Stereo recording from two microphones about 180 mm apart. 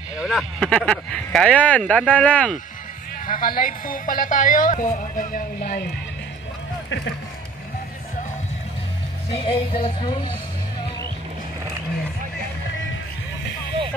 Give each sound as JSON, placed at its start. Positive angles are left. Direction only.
{"t": 0.2, "sound": "speech", "side_deg": 0}
{"t": 3.3, "sound": "speech", "side_deg": 50}
{"t": 9.3, "sound": "music", "side_deg": 30}